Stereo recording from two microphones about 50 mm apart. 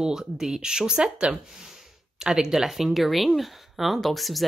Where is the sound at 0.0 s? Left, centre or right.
Centre.